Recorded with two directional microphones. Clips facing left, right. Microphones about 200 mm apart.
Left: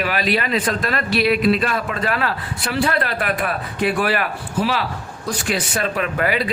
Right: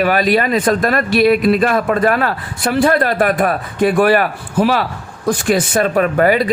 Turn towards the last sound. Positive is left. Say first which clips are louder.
# right 8 dB
turn(degrees=-45)  # may be behind; listen again after turning